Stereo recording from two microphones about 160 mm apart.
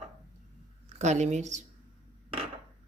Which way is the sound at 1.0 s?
45° right (ahead or behind).